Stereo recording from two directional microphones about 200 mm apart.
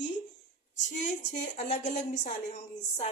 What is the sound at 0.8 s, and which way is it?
A woman's voice, 40° left (ahead or behind).